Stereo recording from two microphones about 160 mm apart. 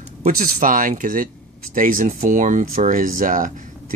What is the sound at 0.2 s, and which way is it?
Speech, 55° right (ahead or behind).